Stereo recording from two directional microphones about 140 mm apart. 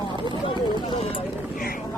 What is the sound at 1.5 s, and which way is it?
Vehicle, 90° left.